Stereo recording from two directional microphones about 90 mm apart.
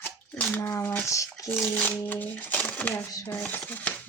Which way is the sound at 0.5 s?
25° left (ahead or behind).